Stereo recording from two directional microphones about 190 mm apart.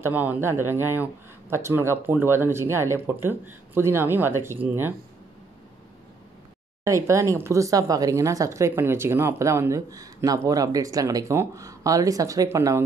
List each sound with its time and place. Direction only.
0.0 s speech: 10° right (ahead or behind)
6.8 s speech: 15° right (ahead or behind)